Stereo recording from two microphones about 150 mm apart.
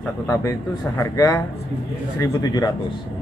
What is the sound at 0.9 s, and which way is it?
Speech, 20° left (ahead or behind).